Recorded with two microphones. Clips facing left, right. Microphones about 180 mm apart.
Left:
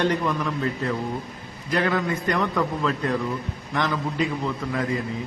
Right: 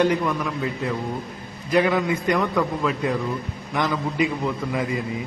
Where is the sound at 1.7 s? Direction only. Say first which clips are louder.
Right 4 dB; 15° right (ahead or behind).